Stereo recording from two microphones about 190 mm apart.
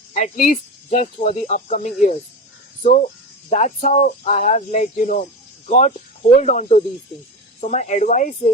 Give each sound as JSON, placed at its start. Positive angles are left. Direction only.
{"t": 0.1, "sound": "speech", "side_deg": 40}